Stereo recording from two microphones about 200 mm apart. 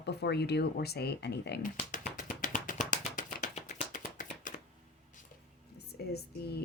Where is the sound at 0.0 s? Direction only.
55° left (ahead or behind).